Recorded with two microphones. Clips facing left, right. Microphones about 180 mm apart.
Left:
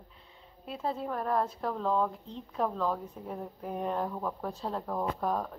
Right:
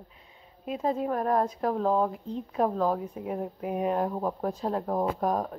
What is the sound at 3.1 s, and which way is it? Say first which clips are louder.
Speech: right 7 dB; 10° right (ahead or behind).